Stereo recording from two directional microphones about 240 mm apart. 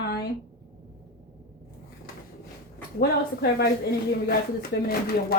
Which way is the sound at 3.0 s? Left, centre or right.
Left.